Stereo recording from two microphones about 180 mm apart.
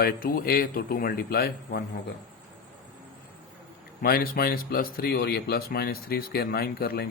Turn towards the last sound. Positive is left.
turn(degrees=60)  # may be behind; listen again after turning